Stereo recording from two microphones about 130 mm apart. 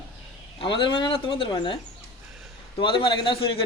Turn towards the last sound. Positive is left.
turn(degrees=45)  # may be behind; listen again after turning